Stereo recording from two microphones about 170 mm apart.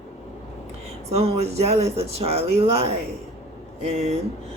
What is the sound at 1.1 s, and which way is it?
Speech, 40° right (ahead or behind).